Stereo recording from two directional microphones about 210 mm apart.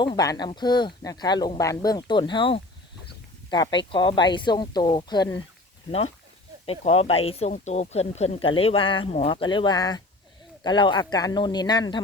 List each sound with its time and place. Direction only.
0.0 s speech: 20° left (ahead or behind)
6.7 s speech: 30° left (ahead or behind)